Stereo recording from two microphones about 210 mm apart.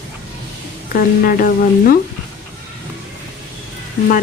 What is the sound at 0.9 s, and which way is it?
Speech, 45° left (ahead or behind).